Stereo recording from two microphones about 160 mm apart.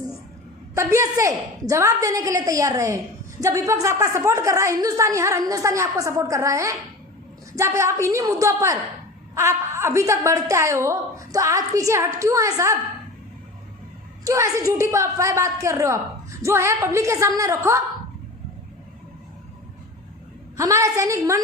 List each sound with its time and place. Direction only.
0.8 s a woman's voice: 20° right (ahead or behind)
14.3 s a woman's voice: 20° right (ahead or behind)
20.6 s a woman's voice: 20° right (ahead or behind)